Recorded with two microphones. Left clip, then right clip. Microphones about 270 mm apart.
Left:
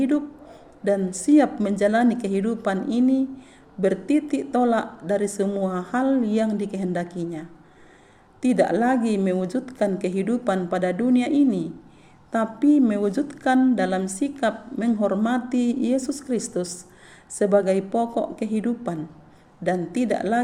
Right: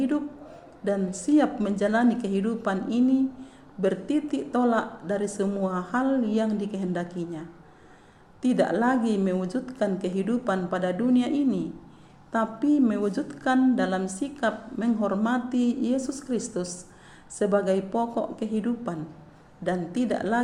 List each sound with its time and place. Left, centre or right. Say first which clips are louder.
0.9 s a woman's voice: left 5 dB; left